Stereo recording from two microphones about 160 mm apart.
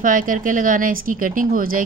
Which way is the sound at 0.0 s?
60° right (ahead or behind).